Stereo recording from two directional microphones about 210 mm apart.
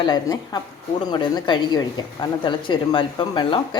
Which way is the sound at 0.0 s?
20° left (ahead or behind).